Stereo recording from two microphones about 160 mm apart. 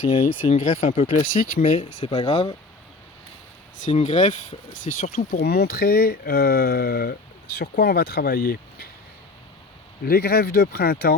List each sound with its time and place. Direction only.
0.4 s speech: 50° left (ahead or behind)
1.8 s speech: 30° left (ahead or behind)
2.3 s speech: 40° left (ahead or behind)
3.8 s speech: 50° left (ahead or behind)
5.3 s speech: 75° left (ahead or behind)
10.1 s speech: 70° left (ahead or behind)